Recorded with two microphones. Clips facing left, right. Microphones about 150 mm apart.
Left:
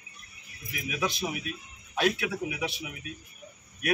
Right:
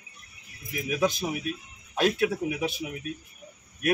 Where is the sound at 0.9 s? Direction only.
40° right (ahead or behind).